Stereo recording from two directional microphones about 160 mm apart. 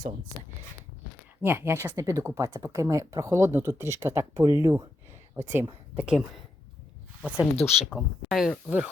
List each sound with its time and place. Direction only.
1.4 s speech: 15° right (ahead or behind)
6.0 s speech: 5° right (ahead or behind)
7.5 s speech: 40° left (ahead or behind)
7.9 s speech: centre (ahead or behind)